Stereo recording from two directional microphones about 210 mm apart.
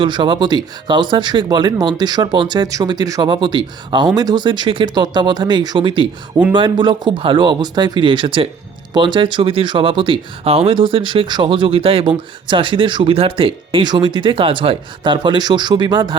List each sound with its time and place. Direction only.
0.0 s speech: 20° right (ahead or behind)